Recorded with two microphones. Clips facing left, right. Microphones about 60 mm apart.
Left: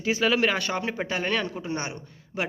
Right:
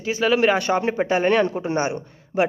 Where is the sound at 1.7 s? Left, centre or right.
Centre.